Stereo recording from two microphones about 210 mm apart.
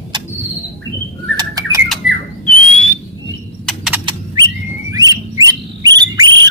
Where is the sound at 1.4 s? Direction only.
20° right (ahead or behind).